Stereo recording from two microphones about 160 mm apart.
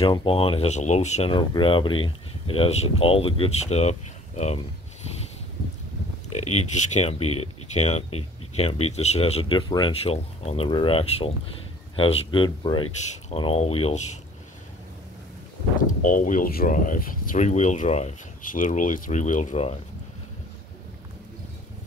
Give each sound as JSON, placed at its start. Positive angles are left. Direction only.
{"t": 0.0, "sound": "speech", "side_deg": 35}
{"t": 1.3, "sound": "speech", "side_deg": 30}
{"t": 6.3, "sound": "speech", "side_deg": 45}
{"t": 10.1, "sound": "speech", "side_deg": 40}
{"t": 16.0, "sound": "speech", "side_deg": 55}